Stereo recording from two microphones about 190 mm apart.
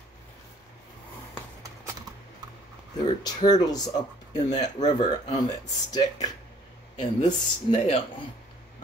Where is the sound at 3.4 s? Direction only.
20° left (ahead or behind).